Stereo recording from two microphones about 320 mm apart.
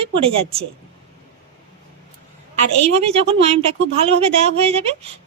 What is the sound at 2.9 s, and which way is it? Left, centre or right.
A woman's voice, centre.